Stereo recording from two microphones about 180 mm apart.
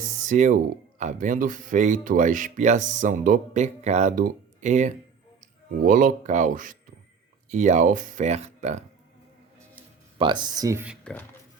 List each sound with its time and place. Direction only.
0.2 s speech: 45° right (ahead or behind)
10.2 s speech: 25° right (ahead or behind)
11.0 s speech: 5° left (ahead or behind)